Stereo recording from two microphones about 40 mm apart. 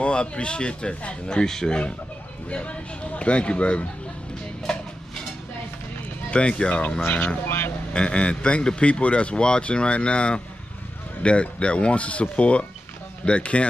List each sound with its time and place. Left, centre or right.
0.0 s speech: left
2.5 s a man's voice: left
6.3 s speech: left
7.4 s speech: left
7.9 s a man's voice: left